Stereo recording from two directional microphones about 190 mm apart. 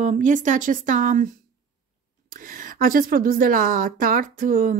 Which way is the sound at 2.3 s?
50° right (ahead or behind).